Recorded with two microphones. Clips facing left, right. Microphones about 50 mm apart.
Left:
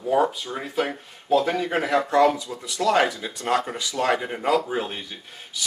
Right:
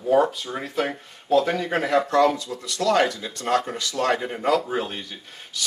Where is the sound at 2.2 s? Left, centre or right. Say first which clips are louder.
Even; centre.